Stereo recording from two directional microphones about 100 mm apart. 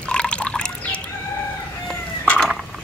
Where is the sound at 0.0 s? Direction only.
10° left (ahead or behind).